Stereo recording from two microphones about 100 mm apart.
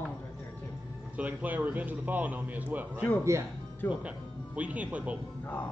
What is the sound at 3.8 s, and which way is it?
Speech, 20° left (ahead or behind).